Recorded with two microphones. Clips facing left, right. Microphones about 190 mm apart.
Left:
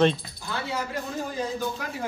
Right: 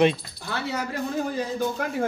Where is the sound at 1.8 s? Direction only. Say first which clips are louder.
Right 6 dB; 55° right (ahead or behind).